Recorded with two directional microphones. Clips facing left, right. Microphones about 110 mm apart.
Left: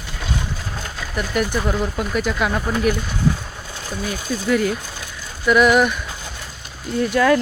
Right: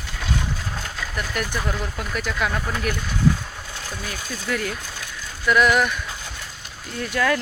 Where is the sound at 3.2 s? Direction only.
20° left (ahead or behind).